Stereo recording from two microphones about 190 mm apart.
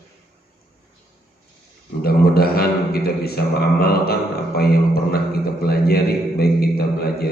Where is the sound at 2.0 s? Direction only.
55° left (ahead or behind).